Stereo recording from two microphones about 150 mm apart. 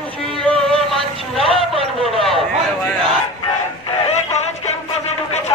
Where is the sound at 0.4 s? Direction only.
5° left (ahead or behind).